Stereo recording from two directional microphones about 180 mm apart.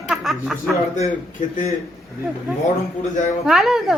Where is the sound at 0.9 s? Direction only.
40° left (ahead or behind).